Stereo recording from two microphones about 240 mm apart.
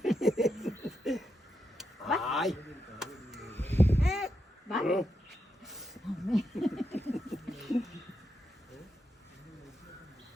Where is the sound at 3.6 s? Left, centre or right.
Centre.